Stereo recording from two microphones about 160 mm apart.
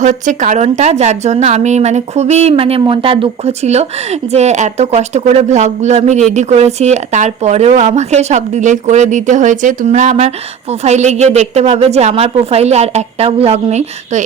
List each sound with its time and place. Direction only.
0.0 s speech: 50° right (ahead or behind)